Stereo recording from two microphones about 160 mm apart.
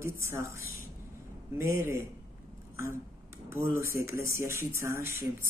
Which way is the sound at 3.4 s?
15° right (ahead or behind).